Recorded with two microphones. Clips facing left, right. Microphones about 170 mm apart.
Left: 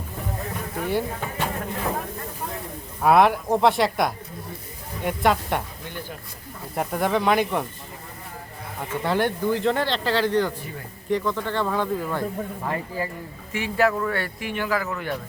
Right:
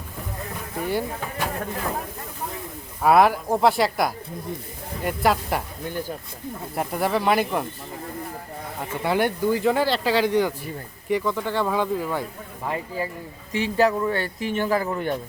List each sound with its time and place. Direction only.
0.8 s speech: centre (ahead or behind)
3.0 s speech: centre (ahead or behind)
6.7 s speech: 5° right (ahead or behind)
9.0 s speech: 10° right (ahead or behind)
12.6 s speech: 15° right (ahead or behind)